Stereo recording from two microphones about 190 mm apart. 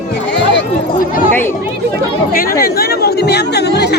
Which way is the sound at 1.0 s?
45° left (ahead or behind).